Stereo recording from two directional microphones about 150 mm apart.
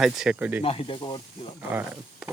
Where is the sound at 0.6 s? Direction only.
40° left (ahead or behind).